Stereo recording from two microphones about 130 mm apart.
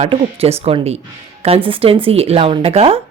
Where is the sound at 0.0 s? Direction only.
45° right (ahead or behind).